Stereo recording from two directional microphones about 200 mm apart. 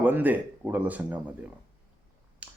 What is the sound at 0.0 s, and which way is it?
A man's voice, 10° right (ahead or behind).